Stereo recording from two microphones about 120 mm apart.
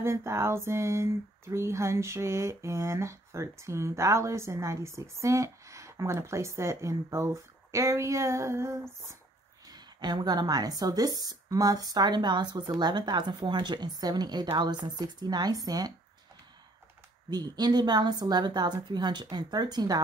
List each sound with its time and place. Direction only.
0.0 s speech: 20° right (ahead or behind)
9.7 s speech: 35° right (ahead or behind)
17.3 s speech: 35° right (ahead or behind)